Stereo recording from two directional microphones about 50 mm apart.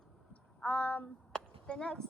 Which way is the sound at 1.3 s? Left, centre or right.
Centre.